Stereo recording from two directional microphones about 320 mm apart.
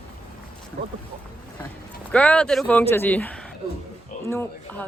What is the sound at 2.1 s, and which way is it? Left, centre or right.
Speech, centre.